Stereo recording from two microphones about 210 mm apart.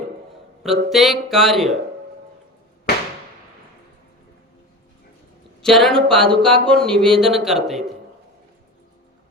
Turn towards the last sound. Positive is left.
turn(degrees=0)  # may be behind; listen again after turning